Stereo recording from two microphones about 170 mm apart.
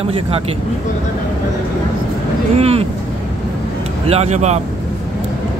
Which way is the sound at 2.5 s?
35° right (ahead or behind).